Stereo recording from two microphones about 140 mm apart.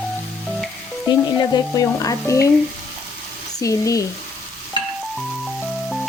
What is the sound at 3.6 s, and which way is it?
Frying, 25° left (ahead or behind).